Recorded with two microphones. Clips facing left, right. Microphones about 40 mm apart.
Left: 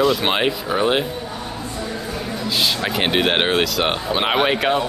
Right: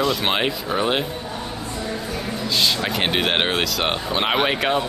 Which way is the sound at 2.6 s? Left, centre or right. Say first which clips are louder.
Left 1 dB; centre.